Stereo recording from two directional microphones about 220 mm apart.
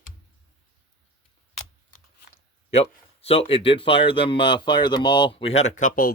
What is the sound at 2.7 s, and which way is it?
Speech, 25° left (ahead or behind).